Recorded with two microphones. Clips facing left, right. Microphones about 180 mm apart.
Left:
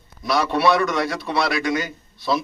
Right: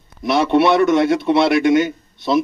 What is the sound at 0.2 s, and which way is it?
A man's voice, 25° right (ahead or behind).